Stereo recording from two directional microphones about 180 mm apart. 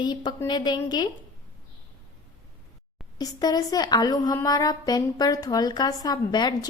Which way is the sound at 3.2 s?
20° left (ahead or behind).